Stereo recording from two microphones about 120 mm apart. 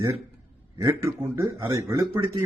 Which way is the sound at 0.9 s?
25° right (ahead or behind).